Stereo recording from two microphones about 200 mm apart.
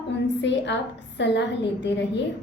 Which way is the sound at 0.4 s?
60° left (ahead or behind).